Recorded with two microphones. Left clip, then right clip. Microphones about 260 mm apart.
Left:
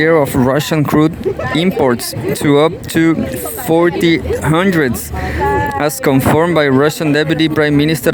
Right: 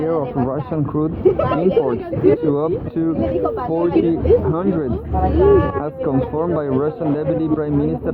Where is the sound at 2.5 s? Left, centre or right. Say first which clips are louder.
Left 7 dB; left.